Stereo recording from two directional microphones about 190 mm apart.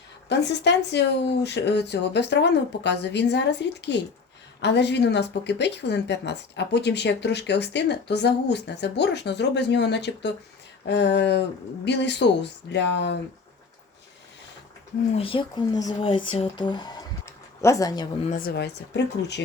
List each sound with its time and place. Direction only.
0.3 s a woman's voice: 65° left (ahead or behind)
15.1 s speech: 30° left (ahead or behind)
18.3 s a woman's voice: 50° left (ahead or behind)